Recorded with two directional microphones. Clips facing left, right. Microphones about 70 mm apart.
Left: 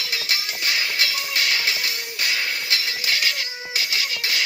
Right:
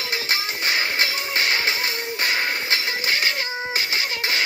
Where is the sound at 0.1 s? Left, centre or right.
Right.